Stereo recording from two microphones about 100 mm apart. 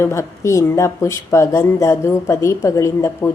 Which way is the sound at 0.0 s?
30° left (ahead or behind).